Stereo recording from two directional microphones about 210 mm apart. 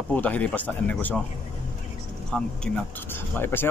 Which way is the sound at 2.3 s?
5° left (ahead or behind).